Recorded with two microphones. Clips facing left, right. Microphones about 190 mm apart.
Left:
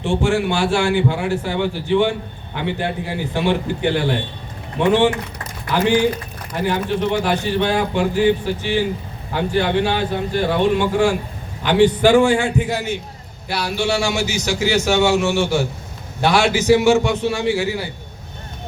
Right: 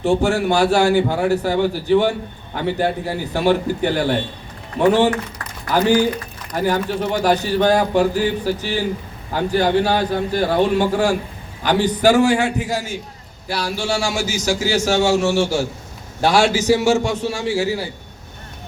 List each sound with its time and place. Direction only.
0.0 s a man's voice: 40° right (ahead or behind)
14.1 s a man's voice: 45° right (ahead or behind)